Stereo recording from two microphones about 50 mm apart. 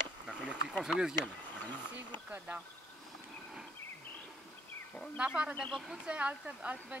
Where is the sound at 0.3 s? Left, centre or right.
Right.